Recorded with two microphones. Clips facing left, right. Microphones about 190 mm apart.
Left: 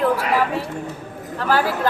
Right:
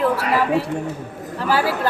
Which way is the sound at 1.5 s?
5° right (ahead or behind).